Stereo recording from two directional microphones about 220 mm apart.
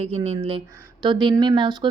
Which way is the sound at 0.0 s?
25° right (ahead or behind).